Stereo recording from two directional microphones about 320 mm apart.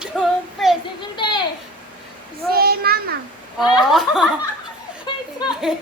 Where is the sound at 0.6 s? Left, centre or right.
Centre.